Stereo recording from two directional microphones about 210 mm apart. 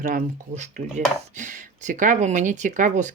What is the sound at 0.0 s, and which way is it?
Speech, 40° right (ahead or behind).